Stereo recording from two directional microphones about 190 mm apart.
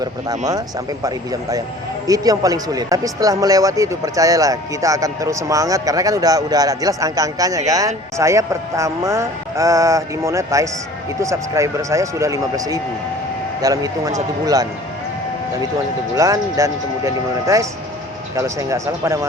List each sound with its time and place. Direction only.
0.0 s a man's voice: 20° right (ahead or behind)
16.1 s speech: 15° right (ahead or behind)